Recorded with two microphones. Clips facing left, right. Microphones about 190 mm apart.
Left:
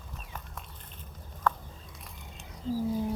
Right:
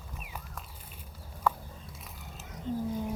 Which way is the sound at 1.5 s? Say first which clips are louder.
Even; 10° right (ahead or behind).